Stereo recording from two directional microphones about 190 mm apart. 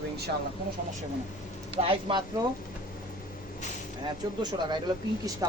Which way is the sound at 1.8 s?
30° right (ahead or behind).